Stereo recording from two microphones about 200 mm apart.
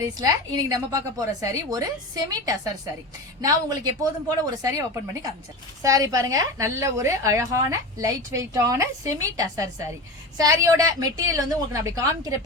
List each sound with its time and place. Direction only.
0.0 s a woman's voice: 20° right (ahead or behind)
3.4 s a woman's voice: 20° right (ahead or behind)